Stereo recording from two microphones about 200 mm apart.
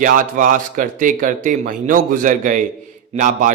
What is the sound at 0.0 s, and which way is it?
A man's voice, 45° right (ahead or behind).